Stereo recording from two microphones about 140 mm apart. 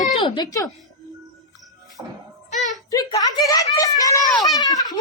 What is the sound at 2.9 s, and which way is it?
Speech, 25° left (ahead or behind).